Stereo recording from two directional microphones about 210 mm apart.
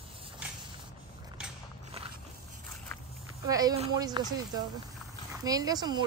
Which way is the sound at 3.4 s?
15° right (ahead or behind).